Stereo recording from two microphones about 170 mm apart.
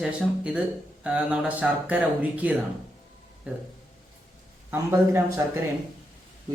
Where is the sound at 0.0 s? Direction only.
5° right (ahead or behind).